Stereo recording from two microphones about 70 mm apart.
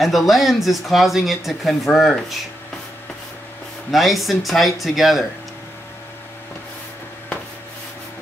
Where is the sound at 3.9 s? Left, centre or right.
Centre.